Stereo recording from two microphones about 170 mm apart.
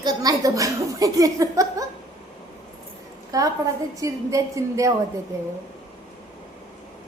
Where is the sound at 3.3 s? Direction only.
20° right (ahead or behind).